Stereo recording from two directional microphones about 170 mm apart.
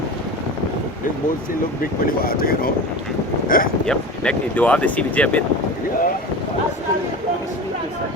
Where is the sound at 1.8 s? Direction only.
60° left (ahead or behind).